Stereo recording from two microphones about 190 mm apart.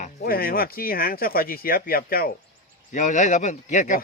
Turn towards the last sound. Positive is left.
turn(degrees=40)  # may be behind; listen again after turning